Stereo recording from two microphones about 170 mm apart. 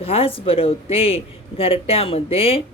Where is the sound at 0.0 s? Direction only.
35° left (ahead or behind).